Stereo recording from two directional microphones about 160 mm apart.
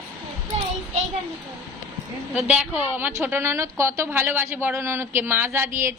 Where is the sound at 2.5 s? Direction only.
10° right (ahead or behind).